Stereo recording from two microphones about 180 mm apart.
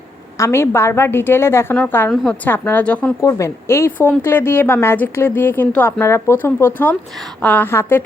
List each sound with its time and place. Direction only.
0.3 s a woman's voice: 15° left (ahead or behind)